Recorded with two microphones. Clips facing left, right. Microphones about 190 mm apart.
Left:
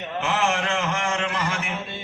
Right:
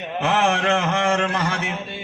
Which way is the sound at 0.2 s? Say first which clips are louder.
Right 4 dB; 65° right (ahead or behind).